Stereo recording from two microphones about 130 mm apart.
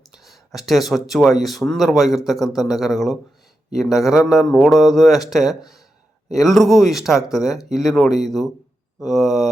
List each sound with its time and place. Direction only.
0.1 s speech: centre (ahead or behind)